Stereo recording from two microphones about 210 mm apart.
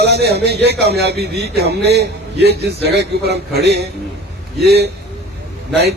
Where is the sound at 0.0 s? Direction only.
50° right (ahead or behind).